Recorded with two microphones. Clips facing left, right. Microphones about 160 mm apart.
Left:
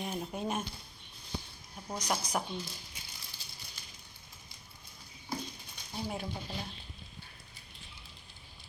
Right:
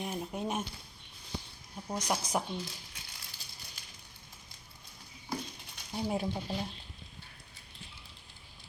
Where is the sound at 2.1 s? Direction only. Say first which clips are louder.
Right 1 dB; 25° right (ahead or behind).